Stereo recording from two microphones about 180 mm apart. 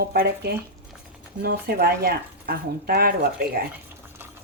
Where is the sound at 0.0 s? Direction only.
60° right (ahead or behind).